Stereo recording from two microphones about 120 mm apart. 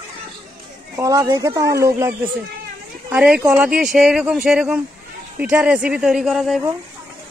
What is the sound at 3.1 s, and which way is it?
Speech, 10° right (ahead or behind).